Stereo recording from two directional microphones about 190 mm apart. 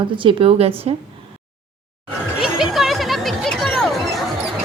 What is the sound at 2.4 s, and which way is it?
Music, centre (ahead or behind).